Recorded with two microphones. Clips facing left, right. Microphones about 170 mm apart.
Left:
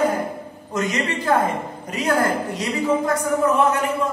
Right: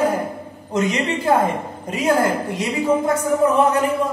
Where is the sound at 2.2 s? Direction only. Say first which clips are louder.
Right 2 dB; 5° right (ahead or behind).